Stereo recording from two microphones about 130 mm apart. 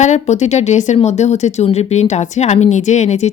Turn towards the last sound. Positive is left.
turn(degrees=60)  # may be behind; listen again after turning